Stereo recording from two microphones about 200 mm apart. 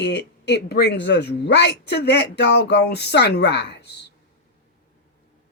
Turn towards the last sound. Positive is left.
turn(degrees=55)  # may be behind; listen again after turning